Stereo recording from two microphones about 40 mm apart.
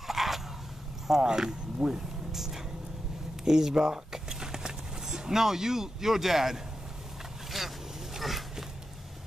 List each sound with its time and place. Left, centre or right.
0.0 s dog: centre
1.0 s speech: centre
7.5 s vehicle: centre